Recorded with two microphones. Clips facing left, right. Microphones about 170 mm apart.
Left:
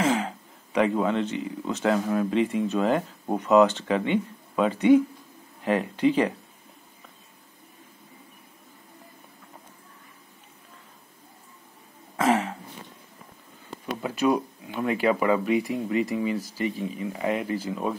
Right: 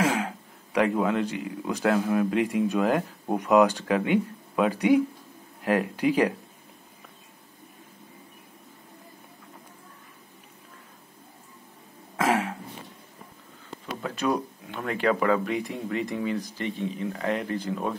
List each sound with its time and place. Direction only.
0.0 s a sound: 5° right (ahead or behind)
0.7 s speech: 5° right (ahead or behind)
12.2 s throat clearing: 5° right (ahead or behind)
14.0 s speech: 10° left (ahead or behind)